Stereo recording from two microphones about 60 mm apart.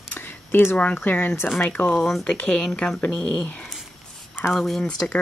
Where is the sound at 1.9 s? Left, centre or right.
Centre.